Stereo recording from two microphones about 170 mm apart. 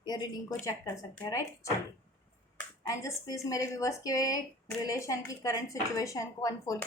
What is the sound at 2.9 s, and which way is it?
A woman's voice, 20° left (ahead or behind).